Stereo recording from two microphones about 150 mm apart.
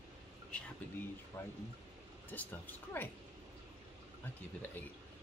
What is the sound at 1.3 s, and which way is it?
Speech, 20° left (ahead or behind).